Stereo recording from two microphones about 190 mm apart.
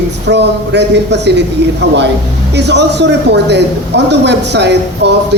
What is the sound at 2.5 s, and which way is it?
A woman's voice, 65° right (ahead or behind).